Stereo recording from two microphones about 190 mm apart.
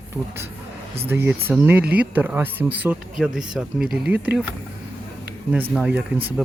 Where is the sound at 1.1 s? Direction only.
10° right (ahead or behind).